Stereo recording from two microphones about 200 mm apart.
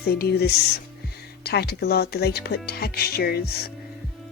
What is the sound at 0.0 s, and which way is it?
A woman's voice, 50° left (ahead or behind).